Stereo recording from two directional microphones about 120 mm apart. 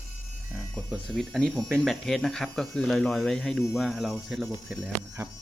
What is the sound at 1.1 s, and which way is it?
Speech, 5° left (ahead or behind).